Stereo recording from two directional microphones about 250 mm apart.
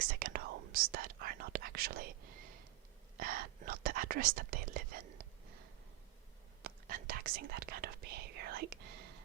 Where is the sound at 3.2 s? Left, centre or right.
Right.